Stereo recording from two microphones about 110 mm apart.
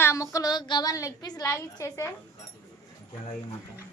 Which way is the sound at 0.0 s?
30° left (ahead or behind).